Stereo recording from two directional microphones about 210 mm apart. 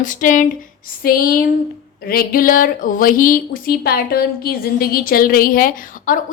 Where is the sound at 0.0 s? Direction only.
40° left (ahead or behind).